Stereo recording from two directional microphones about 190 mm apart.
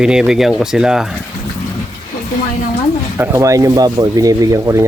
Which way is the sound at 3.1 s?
15° right (ahead or behind).